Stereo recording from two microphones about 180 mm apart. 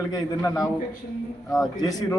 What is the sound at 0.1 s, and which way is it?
A man's voice, 20° left (ahead or behind).